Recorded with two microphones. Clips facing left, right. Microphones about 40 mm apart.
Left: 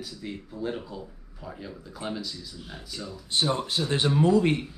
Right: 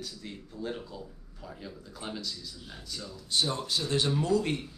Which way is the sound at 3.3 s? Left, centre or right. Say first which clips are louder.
Left 3 dB; left.